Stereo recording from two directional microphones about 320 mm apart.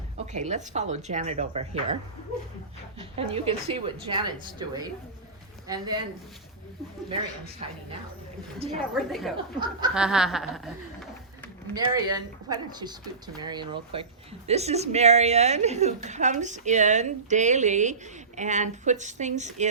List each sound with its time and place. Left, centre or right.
0.3 s speech: right
3.0 s a woman's voice: centre
8.5 s a woman's voice: centre
9.0 s speech: centre
11.7 s speech: centre